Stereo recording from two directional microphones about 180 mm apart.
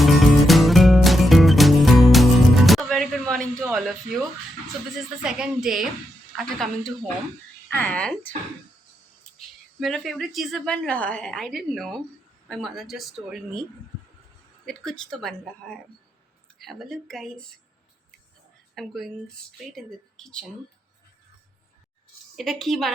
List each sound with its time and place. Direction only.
0.0 s music: centre (ahead or behind)
3.7 s a sound: centre (ahead or behind)
4.9 s a woman's voice: 5° right (ahead or behind)
9.8 s a woman's voice: centre (ahead or behind)
14.7 s a woman's voice: 5° left (ahead or behind)
18.7 s a woman's voice: centre (ahead or behind)
22.4 s a woman's voice: centre (ahead or behind)